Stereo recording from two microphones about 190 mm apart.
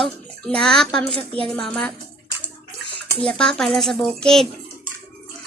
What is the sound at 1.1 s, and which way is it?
Speech, 30° right (ahead or behind).